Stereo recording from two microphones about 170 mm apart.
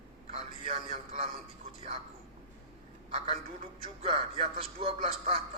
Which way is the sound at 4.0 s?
35° right (ahead or behind).